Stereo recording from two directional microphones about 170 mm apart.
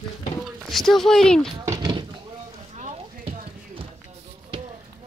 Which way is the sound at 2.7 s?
40° right (ahead or behind).